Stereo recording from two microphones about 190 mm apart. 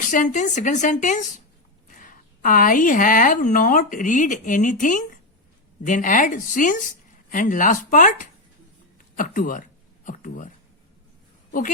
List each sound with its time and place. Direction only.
0.1 s a woman's voice: 40° left (ahead or behind)